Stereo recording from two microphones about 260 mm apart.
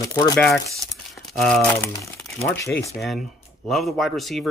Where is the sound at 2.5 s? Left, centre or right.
Centre.